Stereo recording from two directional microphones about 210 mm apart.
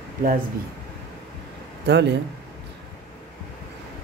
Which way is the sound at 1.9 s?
55° right (ahead or behind).